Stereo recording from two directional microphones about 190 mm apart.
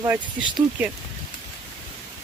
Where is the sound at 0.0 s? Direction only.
15° right (ahead or behind).